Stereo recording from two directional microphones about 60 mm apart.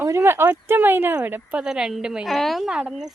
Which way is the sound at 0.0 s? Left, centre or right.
Right.